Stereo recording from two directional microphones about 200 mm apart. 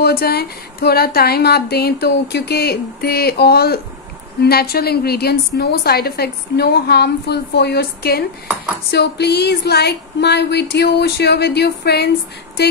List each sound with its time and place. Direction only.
0.0 s a woman's voice: 50° left (ahead or behind)